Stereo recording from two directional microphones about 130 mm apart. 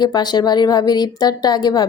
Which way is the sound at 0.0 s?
30° left (ahead or behind).